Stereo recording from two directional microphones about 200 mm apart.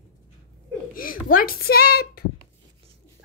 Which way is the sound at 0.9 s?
45° left (ahead or behind).